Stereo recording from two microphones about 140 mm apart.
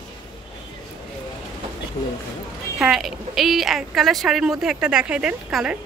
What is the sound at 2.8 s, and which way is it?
A woman's voice, centre (ahead or behind).